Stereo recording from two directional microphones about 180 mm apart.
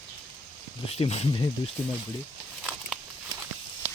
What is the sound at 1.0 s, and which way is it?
Speech, 35° left (ahead or behind).